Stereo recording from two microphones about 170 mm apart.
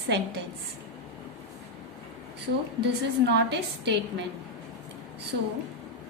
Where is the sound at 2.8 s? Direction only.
85° right.